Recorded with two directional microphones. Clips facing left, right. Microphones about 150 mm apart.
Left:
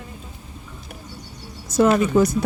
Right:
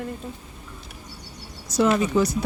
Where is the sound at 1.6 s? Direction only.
50° left (ahead or behind).